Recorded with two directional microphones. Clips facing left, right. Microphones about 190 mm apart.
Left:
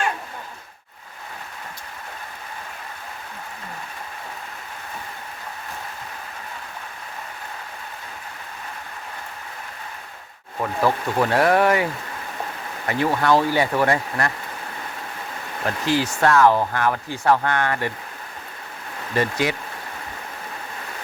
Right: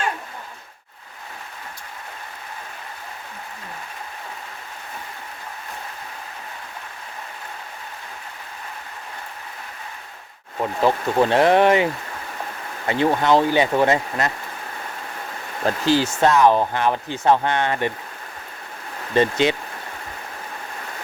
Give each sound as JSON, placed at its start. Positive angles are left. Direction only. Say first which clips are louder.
{"t": 10.6, "sound": "speech", "louder": "right 2 dB", "side_deg": -20}
{"t": 12.9, "sound": "speech", "louder": "right 2 dB", "side_deg": -20}
{"t": 15.6, "sound": "speech", "louder": "right 3 dB", "side_deg": -30}
{"t": 19.1, "sound": "speech", "louder": "right 4 dB", "side_deg": -25}